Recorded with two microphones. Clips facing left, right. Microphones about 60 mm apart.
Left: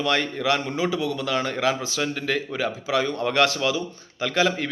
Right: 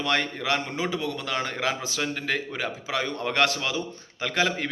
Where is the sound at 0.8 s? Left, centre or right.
Right.